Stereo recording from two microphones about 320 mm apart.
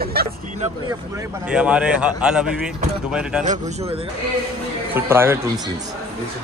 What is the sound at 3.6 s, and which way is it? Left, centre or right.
Speech, centre.